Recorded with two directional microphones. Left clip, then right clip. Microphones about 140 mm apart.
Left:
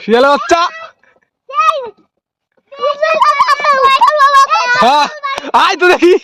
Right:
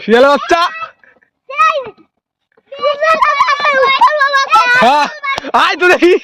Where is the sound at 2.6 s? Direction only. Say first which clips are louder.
Right 1 dB; 10° left (ahead or behind).